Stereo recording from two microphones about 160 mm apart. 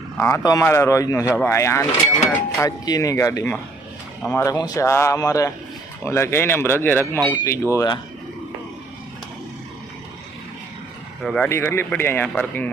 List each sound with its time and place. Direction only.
0.2 s a man's voice: 15° left (ahead or behind)
4.4 s a man's voice: 25° left (ahead or behind)
11.2 s speech: centre (ahead or behind)
11.4 s speech: 15° left (ahead or behind)